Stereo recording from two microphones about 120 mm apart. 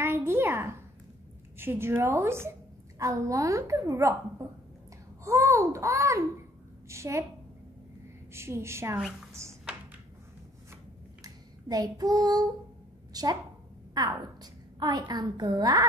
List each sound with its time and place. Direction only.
0.0 s a child's voice: 20° right (ahead or behind)
8.3 s a woman's voice: 20° right (ahead or behind)
11.2 s a sound: 30° right (ahead or behind)
13.1 s a woman's voice: 30° right (ahead or behind)